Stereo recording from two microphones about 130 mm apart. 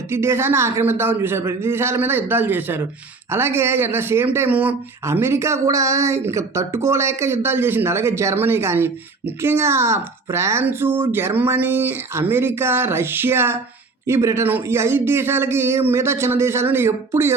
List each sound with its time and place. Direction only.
0.1 s a man's voice: 20° right (ahead or behind)